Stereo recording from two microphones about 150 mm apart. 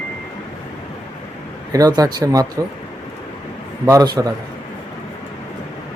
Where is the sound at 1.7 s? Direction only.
25° right (ahead or behind).